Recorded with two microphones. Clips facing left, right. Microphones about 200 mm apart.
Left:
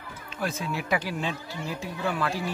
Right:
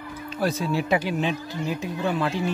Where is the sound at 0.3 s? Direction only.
35° right (ahead or behind).